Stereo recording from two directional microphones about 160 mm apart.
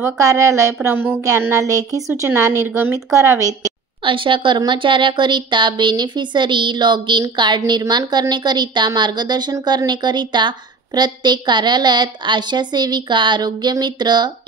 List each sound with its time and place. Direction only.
0.0 s speech: 20° right (ahead or behind)
3.6 s speech: 30° right (ahead or behind)